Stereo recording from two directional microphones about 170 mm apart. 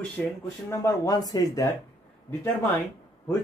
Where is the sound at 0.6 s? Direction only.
20° left (ahead or behind).